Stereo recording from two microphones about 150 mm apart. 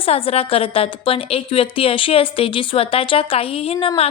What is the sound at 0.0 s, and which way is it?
A woman's voice, 40° left (ahead or behind).